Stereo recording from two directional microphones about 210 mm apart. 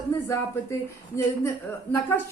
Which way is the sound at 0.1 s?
15° left (ahead or behind).